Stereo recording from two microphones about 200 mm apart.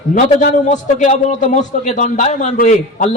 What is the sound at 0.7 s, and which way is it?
A man's voice, 35° left (ahead or behind).